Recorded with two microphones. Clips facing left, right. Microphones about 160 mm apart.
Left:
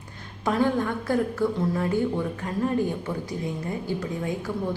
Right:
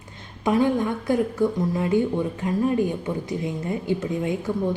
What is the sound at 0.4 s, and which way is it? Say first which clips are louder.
A woman's voice: right 3 dB; 15° right (ahead or behind).